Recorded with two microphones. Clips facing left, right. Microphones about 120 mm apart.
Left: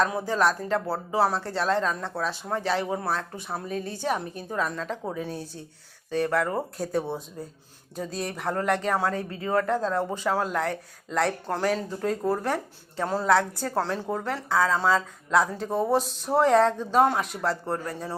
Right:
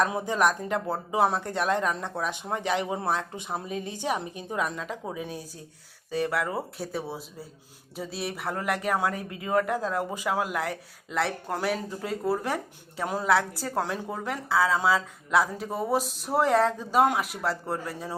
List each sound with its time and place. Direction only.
0.0 s speech: 20° right (ahead or behind)